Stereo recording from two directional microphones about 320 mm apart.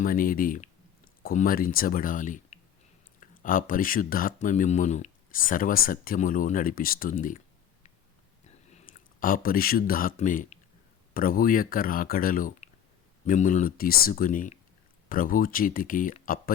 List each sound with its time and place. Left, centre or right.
0.0 s speech: left
8.7 s speech: left